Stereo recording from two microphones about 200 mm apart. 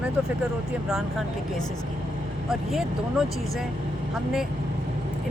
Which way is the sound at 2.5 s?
Centre (ahead or behind).